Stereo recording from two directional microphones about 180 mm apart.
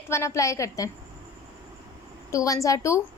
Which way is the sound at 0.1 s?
15° left (ahead or behind).